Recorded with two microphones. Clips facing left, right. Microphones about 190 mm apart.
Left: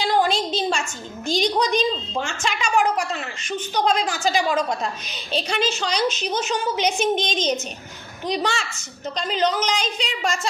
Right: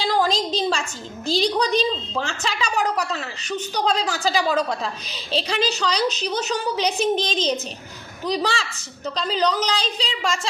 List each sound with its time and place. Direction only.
0.0 s a woman's voice: 35° right (ahead or behind)